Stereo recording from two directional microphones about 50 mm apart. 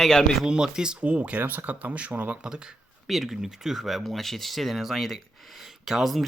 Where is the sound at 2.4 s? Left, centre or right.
Centre.